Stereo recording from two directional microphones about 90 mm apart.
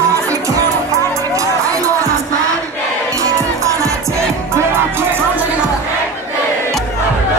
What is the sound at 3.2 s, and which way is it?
Music, 35° right (ahead or behind).